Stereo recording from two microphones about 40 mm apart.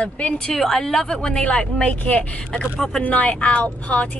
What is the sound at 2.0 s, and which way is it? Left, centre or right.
Speech, left.